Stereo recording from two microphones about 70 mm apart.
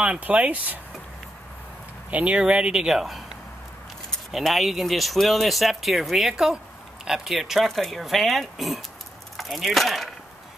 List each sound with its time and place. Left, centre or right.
0.0 s speech: centre
2.0 s speech: centre